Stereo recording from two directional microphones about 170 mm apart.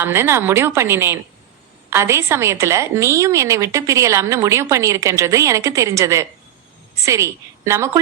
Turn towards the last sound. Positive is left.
turn(degrees=-15)  # may be behind; listen again after turning